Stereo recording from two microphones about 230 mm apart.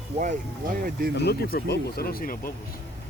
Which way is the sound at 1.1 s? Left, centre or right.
Left.